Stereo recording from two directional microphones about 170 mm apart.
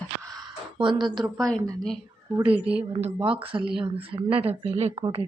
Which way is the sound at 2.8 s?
35° right (ahead or behind).